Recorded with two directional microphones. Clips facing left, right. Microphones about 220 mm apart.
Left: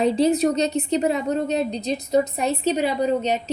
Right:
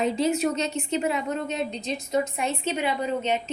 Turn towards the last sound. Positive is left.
turn(degrees=40)  # may be behind; listen again after turning